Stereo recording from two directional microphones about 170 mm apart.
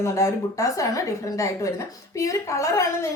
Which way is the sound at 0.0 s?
20° left (ahead or behind).